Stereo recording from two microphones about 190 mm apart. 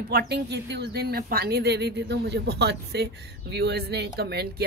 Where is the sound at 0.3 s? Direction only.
65° right (ahead or behind).